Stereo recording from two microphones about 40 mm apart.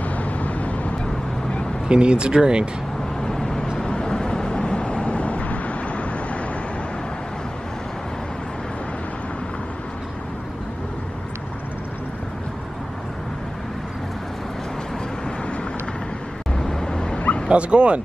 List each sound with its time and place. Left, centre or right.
0.1 s vehicle: left
1.9 s speech: right
3.2 s vehicle: centre; by 6.0 s left
16.5 s vehicle: centre
17.5 s speech: right